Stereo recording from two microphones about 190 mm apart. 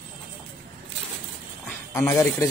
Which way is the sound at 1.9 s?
15° left (ahead or behind).